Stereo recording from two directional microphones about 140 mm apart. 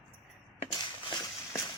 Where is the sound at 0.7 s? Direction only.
30° left (ahead or behind).